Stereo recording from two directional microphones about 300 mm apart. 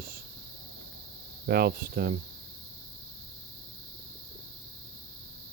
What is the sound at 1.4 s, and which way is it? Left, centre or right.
Speech, right.